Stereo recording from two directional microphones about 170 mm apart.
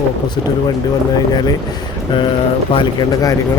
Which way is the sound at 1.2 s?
25° left (ahead or behind).